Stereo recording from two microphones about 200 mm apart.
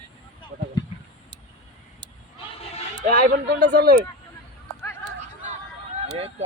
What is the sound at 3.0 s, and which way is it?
Speech, 55° right (ahead or behind).